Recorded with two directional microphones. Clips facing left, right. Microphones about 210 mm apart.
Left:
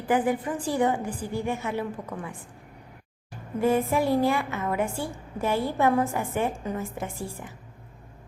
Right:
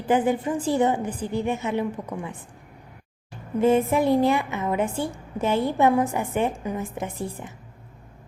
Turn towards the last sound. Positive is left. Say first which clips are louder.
# right 3 dB
turn(degrees=-20)  # may be behind; listen again after turning